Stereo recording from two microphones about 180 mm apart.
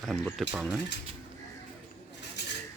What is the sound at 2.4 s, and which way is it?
Cutlery, 75° left (ahead or behind).